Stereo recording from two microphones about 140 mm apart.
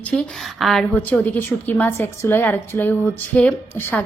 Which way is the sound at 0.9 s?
15° left (ahead or behind).